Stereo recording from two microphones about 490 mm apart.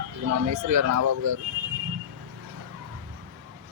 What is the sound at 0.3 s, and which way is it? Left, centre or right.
Speech, right.